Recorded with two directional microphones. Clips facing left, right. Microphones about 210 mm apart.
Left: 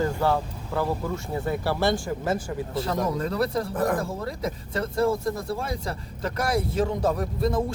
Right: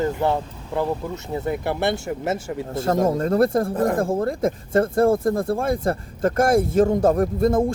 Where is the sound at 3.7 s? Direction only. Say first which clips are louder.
Right 4 dB; 25° right (ahead or behind).